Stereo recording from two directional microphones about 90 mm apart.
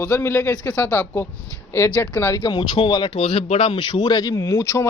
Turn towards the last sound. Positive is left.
turn(degrees=35)  # may be behind; listen again after turning